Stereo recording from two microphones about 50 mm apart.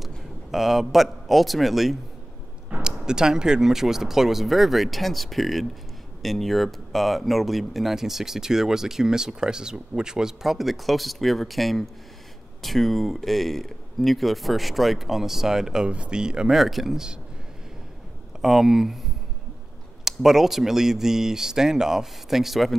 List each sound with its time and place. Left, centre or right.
0.5 s speech: centre
2.8 s speech: centre
15.9 s speech: centre
16.5 s speech: centre
18.4 s speech: centre